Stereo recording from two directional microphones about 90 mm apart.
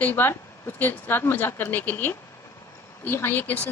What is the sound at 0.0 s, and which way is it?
Speech, 20° left (ahead or behind).